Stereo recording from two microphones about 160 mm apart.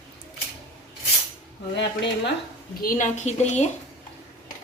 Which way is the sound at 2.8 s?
50° left (ahead or behind).